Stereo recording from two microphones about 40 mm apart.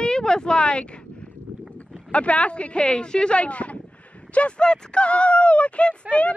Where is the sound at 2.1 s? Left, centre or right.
Left.